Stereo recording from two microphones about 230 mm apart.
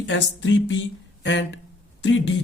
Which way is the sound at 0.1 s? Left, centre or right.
Left.